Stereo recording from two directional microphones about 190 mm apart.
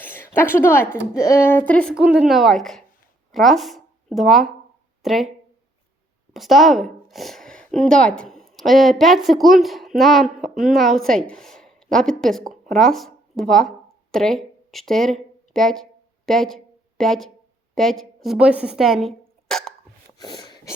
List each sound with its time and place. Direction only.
0.0 s a woman's voice: 10° left (ahead or behind)
6.3 s speech: centre (ahead or behind)
20.1 s a sound: 20° left (ahead or behind)